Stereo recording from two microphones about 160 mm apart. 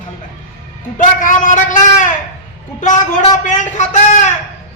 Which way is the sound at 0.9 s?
55° left (ahead or behind).